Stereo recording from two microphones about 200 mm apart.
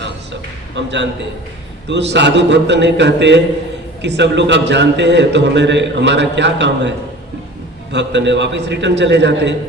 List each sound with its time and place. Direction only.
1.9 s a man's voice: 60° right (ahead or behind)
7.9 s a man's voice: 60° right (ahead or behind)